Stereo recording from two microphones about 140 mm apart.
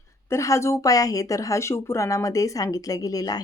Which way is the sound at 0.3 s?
20° left (ahead or behind).